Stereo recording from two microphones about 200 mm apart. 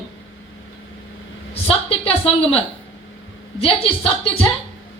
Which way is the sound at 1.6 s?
30° left (ahead or behind).